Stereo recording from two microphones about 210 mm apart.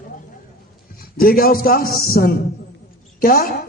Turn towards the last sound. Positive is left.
turn(degrees=45)  # may be behind; listen again after turning